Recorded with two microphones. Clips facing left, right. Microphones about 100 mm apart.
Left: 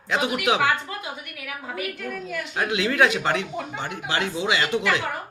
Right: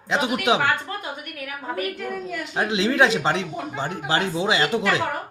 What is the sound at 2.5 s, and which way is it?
Speech, 25° right (ahead or behind).